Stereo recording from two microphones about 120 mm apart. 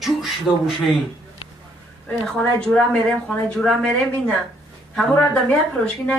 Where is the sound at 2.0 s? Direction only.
5° left (ahead or behind).